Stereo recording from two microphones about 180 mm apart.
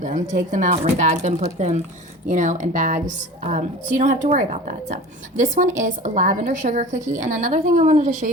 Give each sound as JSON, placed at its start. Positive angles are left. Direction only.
{"t": 0.0, "sound": "a woman's voice", "side_deg": -45}